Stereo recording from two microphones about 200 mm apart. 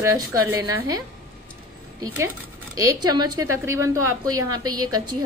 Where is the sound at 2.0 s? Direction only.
15° right (ahead or behind).